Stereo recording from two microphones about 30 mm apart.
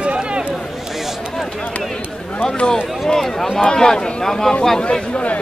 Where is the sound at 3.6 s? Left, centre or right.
Left.